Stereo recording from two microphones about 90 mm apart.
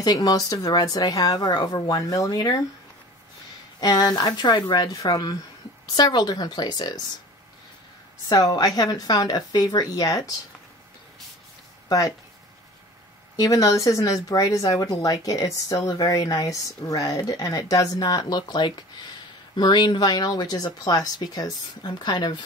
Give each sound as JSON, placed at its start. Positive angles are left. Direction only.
{"t": 0.0, "sound": "speech", "side_deg": 45}
{"t": 3.8, "sound": "speech", "side_deg": 45}
{"t": 8.3, "sound": "speech", "side_deg": 40}
{"t": 13.4, "sound": "speech", "side_deg": 40}